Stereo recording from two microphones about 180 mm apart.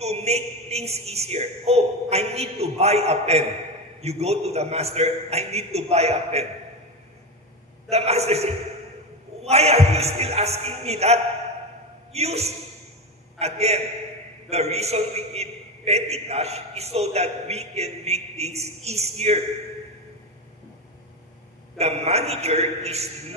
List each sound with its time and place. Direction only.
0.0 s a man's voice: 35° right (ahead or behind)
7.9 s a man's voice: 35° right (ahead or behind)
21.7 s a man's voice: 35° right (ahead or behind)